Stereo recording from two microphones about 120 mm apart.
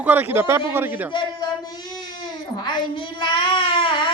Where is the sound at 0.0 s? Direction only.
15° right (ahead or behind).